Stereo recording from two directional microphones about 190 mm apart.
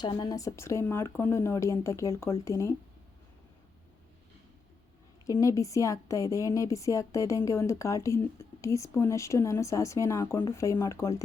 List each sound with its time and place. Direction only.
0.0 s a woman's voice: 20° left (ahead or behind)
5.4 s a woman's voice: 15° left (ahead or behind)